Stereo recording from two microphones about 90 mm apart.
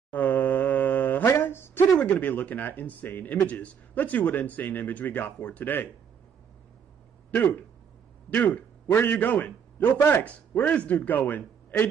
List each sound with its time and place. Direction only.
0.1 s a sound: 20° left (ahead or behind)
2.0 s speech: 15° left (ahead or behind)
7.2 s a man's voice: 20° left (ahead or behind)